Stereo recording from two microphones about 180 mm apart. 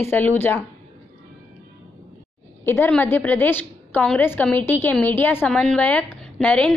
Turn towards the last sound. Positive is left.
turn(degrees=5)  # may be behind; listen again after turning